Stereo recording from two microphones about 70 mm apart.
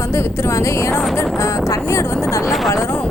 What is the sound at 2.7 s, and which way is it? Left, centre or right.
Speech, left.